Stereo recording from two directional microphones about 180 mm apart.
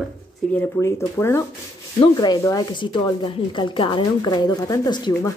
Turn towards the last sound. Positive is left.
turn(degrees=25)  # may be behind; listen again after turning